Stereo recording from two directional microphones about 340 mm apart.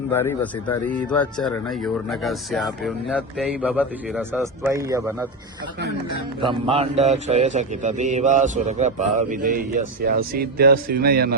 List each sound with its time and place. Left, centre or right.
0.1 s a man's voice: centre
6.4 s a man's voice: centre